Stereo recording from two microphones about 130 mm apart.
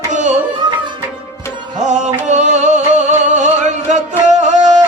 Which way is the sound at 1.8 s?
65° right (ahead or behind).